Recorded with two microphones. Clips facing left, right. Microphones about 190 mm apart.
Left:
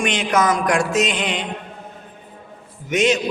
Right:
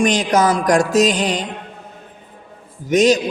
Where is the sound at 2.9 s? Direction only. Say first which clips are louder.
Right 5 dB; 35° right (ahead or behind).